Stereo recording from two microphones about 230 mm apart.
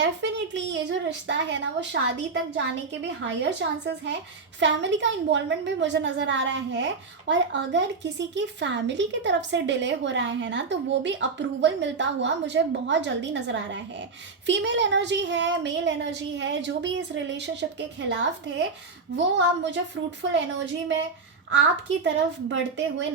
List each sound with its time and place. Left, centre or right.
0.0 s a woman's voice: right
21.5 s a woman's voice: right